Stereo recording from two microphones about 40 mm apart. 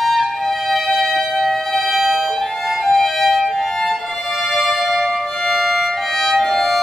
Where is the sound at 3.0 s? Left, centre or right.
Centre.